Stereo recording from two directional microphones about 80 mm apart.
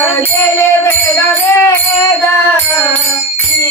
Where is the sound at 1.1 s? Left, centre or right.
Left.